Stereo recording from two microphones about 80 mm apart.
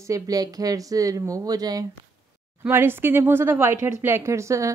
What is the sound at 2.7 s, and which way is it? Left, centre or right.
Speech, right.